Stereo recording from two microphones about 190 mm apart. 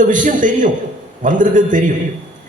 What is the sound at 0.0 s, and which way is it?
A man's voice, 40° right (ahead or behind).